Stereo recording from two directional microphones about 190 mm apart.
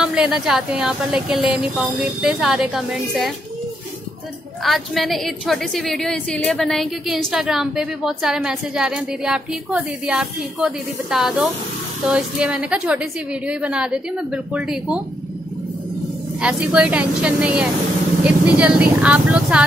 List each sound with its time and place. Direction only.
0.0 s a woman's voice: 5° right (ahead or behind)
4.6 s a woman's voice: centre (ahead or behind)
16.3 s a woman's voice: 5° right (ahead or behind)